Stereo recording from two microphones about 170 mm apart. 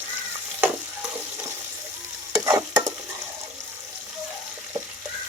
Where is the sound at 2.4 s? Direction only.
20° right (ahead or behind).